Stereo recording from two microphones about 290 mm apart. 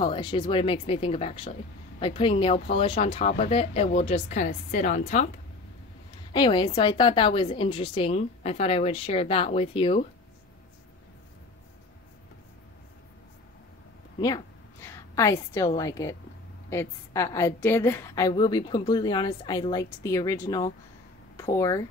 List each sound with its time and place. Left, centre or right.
0.0 s a woman's voice: centre
6.3 s a woman's voice: centre
14.2 s a woman's voice: centre